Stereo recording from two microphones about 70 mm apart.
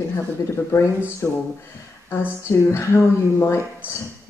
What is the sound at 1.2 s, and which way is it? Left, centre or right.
Speech, left.